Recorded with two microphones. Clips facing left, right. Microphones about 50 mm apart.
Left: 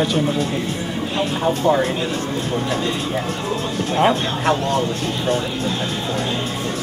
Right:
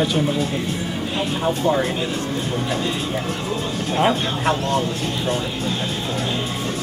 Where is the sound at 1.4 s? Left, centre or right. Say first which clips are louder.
Left 2 dB; centre.